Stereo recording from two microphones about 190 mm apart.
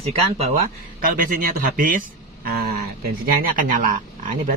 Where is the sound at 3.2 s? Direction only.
50° right (ahead or behind).